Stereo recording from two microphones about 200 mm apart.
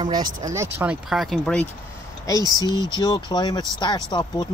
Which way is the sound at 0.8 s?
5° right (ahead or behind).